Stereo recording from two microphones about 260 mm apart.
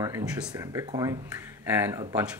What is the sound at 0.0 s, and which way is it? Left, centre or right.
Speech, centre.